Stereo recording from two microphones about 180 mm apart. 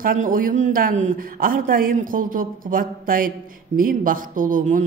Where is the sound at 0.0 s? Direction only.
50° right (ahead or behind).